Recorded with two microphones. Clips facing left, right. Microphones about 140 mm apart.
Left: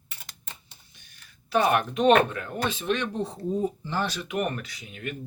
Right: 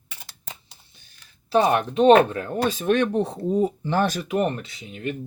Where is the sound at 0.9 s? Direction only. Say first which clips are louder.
Even; 30° right (ahead or behind).